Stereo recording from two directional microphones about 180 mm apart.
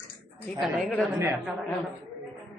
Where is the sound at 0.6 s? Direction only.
Centre (ahead or behind).